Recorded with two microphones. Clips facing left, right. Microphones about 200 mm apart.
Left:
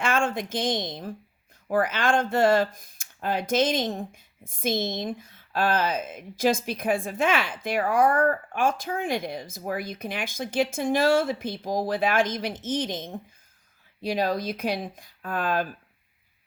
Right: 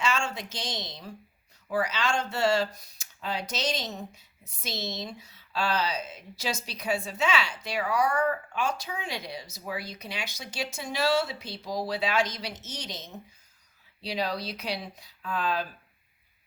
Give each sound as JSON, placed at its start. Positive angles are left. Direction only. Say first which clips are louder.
{"t": 0.0, "sound": "speech", "louder": "left 5 dB", "side_deg": 55}